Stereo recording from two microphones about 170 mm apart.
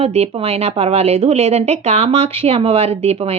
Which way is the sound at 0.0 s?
35° right (ahead or behind).